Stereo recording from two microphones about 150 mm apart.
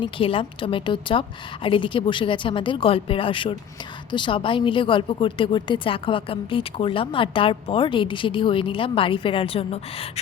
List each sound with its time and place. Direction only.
0.0 s a woman's voice: 35° left (ahead or behind)